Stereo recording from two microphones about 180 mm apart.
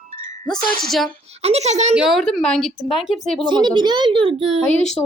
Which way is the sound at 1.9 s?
5° right (ahead or behind).